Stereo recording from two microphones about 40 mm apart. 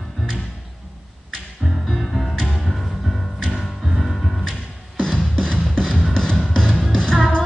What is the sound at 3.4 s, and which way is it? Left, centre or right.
Music, centre.